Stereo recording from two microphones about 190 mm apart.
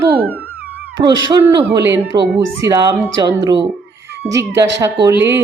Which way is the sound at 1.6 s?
10° right (ahead or behind).